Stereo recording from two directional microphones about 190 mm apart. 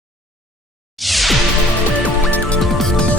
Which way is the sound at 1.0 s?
Centre (ahead or behind).